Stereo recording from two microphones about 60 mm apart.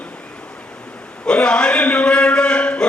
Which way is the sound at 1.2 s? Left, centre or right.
Centre.